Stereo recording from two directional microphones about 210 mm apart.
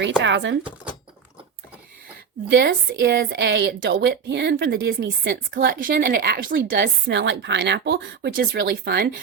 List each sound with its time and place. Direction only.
0.2 s speech: 60° right (ahead or behind)
2.5 s a woman's voice: 55° right (ahead or behind)